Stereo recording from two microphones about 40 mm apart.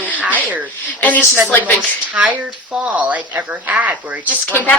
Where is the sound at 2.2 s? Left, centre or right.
Right.